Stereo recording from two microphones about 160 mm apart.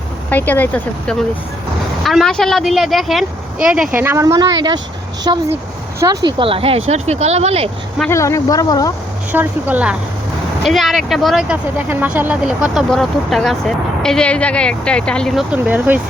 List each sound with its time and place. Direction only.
0.3 s speech: 10° left (ahead or behind); by 7.7 s 40° right (ahead or behind)
8.1 s speech: 20° left (ahead or behind)
9.3 s speech: 10° right (ahead or behind)
15.5 s speech: 10° right (ahead or behind)